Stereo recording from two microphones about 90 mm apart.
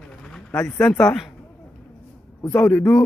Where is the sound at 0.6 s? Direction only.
15° left (ahead or behind).